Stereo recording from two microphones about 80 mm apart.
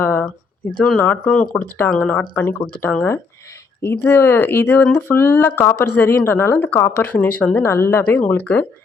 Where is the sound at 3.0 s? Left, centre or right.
Left.